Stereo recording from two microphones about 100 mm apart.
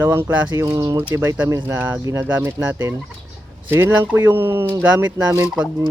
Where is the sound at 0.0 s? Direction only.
25° right (ahead or behind).